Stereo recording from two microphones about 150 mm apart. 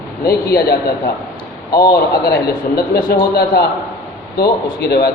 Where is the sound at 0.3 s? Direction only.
90° left.